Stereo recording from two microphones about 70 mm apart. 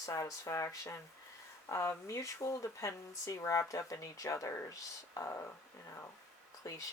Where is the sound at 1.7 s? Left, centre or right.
Left.